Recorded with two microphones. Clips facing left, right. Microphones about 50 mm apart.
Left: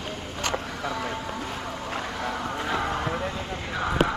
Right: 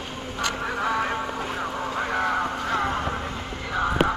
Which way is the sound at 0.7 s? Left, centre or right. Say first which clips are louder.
Right 6 dB; right.